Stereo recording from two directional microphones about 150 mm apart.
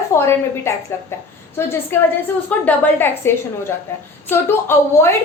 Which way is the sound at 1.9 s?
15° left (ahead or behind).